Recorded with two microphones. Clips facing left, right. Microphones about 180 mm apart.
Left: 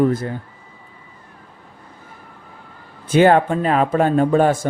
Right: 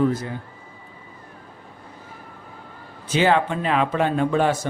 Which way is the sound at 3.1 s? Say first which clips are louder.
Left 6 dB; 50° left (ahead or behind).